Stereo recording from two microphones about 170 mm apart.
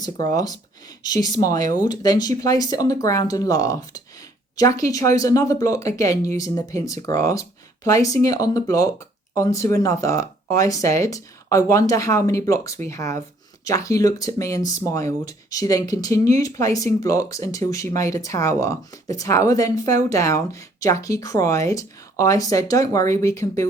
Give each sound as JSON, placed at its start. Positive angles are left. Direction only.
{"t": 0.0, "sound": "speech", "side_deg": 20}